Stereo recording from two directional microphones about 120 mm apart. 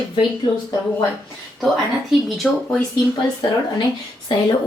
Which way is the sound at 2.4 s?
Centre (ahead or behind).